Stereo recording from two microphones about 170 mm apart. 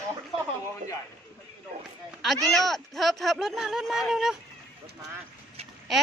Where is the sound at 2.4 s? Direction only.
Centre (ahead or behind).